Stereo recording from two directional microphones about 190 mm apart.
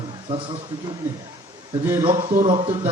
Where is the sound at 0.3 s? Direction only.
30° right (ahead or behind).